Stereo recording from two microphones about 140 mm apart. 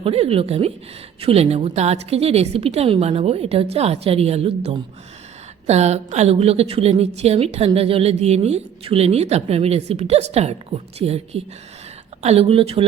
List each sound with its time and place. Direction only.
0.0 s a woman's voice: 45° right (ahead or behind)